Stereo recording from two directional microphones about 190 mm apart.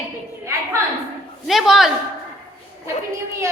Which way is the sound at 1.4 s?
Centre (ahead or behind).